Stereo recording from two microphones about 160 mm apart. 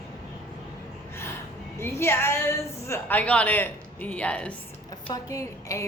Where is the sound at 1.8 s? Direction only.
15° left (ahead or behind).